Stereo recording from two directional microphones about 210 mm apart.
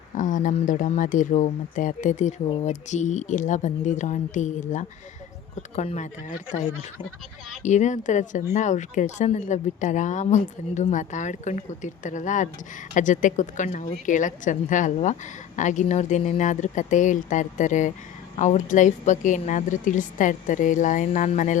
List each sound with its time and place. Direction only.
0.2 s a woman's voice: 40° left (ahead or behind)